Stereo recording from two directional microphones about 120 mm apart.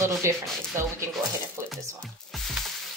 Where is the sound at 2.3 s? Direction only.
Centre (ahead or behind).